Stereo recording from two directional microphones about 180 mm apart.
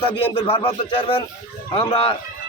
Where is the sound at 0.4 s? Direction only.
25° left (ahead or behind).